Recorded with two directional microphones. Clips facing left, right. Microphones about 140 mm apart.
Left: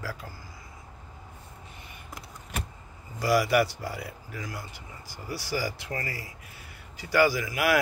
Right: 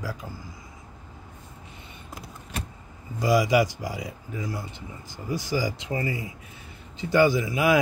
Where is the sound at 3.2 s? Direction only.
15° right (ahead or behind).